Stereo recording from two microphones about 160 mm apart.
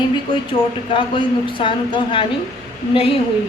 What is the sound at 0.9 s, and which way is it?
A woman's voice, 30° left (ahead or behind).